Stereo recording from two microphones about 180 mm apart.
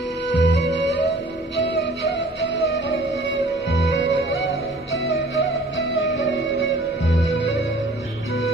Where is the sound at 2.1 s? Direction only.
90° left.